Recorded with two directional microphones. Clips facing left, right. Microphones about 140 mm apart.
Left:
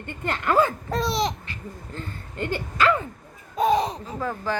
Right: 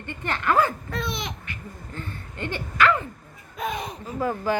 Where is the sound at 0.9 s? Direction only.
35° left (ahead or behind).